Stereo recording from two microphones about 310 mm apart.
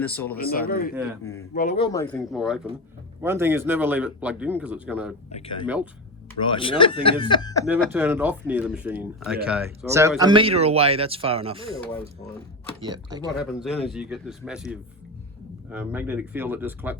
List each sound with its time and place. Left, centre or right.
0.0 s a man's voice: centre
0.3 s speech: left
0.9 s a man's voice: centre
1.2 s speech: centre
1.5 s speech: left
3.2 s a man's voice: centre
5.3 s speech: centre
5.6 s a man's voice: centre
6.4 s speech: centre
7.9 s a man's voice: centre
12.8 s speech: centre
13.4 s a man's voice: centre